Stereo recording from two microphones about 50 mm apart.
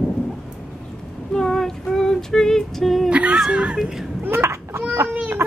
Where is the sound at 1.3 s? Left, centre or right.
Centre.